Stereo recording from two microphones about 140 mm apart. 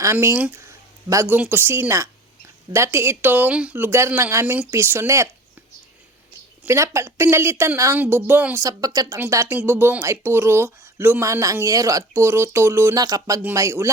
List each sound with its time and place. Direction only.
0.0 s speech: 20° right (ahead or behind)
6.7 s speech: 20° right (ahead or behind)
8.6 s speech: 25° right (ahead or behind)